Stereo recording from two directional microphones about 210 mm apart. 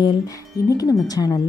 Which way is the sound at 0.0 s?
15° left (ahead or behind).